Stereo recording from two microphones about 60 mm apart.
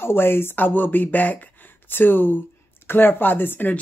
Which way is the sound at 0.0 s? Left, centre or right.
Left.